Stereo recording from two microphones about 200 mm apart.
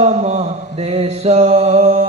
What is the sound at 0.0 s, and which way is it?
Mantra, 35° right (ahead or behind).